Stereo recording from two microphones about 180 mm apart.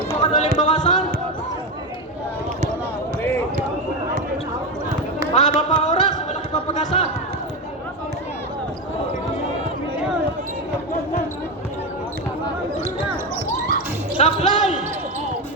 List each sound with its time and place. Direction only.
0.2 s speech: 40° left (ahead or behind)
5.3 s speech: 40° left (ahead or behind)
5.8 s a sound: 40° left (ahead or behind)
14.2 s basketball bounce: 40° left (ahead or behind)